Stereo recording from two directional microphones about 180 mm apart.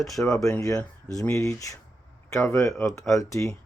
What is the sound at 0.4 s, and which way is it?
Speech, 15° left (ahead or behind).